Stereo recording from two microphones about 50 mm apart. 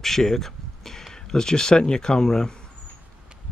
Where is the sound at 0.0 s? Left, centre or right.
Centre.